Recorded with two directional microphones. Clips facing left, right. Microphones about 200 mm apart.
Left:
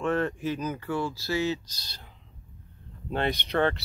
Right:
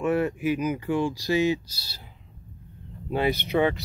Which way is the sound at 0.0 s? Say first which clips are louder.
Right 3 dB; 10° right (ahead or behind).